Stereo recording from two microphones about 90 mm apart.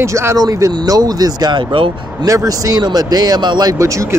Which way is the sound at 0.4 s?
45° right (ahead or behind).